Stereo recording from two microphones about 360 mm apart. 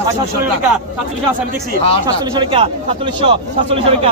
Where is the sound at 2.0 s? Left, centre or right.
Centre.